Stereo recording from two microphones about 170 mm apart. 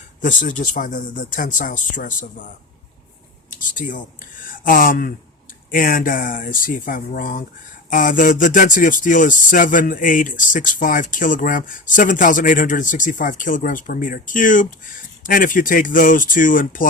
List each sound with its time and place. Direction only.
0.2 s speech: 50° left (ahead or behind)
3.5 s a sound: 50° left (ahead or behind)
4.4 s speech: 55° left (ahead or behind)